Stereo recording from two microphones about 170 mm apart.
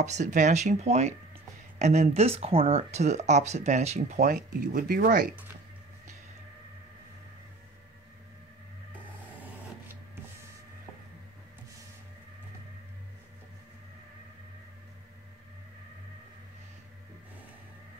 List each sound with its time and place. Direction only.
0.0 s speech: 45° right (ahead or behind); by 5.3 s 60° right (ahead or behind)